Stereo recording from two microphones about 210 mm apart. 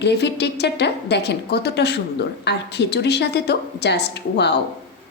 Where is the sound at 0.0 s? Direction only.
55° left (ahead or behind).